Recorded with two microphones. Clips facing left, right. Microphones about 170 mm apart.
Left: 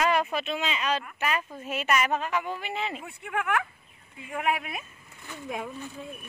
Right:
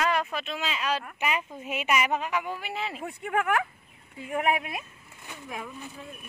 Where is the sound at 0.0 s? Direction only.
5° left (ahead or behind).